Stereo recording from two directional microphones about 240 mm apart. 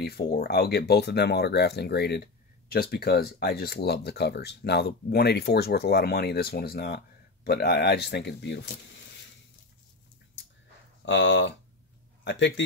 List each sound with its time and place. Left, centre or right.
0.0 s speech: left
11.1 s speech: left